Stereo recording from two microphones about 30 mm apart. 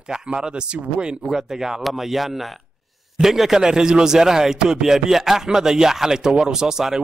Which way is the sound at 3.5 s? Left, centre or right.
Right.